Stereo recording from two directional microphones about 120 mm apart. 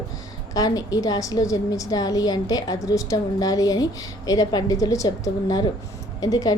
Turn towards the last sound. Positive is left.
turn(degrees=30)  # may be behind; listen again after turning